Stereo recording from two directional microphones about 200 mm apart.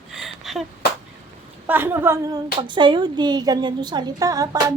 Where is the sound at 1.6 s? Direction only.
10° right (ahead or behind).